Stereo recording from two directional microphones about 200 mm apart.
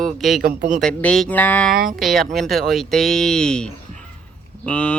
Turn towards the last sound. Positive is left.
turn(degrees=5)  # may be behind; listen again after turning